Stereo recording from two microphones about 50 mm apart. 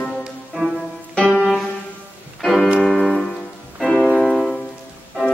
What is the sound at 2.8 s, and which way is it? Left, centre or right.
Music, centre.